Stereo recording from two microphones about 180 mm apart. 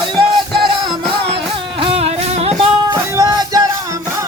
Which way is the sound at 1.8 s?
35° right (ahead or behind).